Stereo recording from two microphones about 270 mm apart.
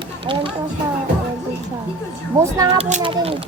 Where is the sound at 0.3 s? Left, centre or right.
Centre.